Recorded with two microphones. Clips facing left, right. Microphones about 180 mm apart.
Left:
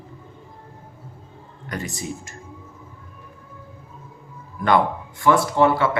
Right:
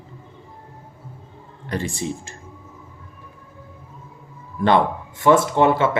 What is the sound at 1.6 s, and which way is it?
Speech, 30° right (ahead or behind).